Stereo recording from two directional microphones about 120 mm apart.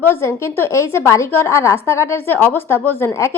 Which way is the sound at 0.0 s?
20° left (ahead or behind).